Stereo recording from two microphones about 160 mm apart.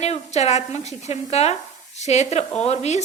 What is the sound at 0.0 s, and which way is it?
A woman's voice, 45° left (ahead or behind).